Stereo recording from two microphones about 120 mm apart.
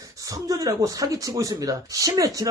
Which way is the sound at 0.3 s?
30° right (ahead or behind).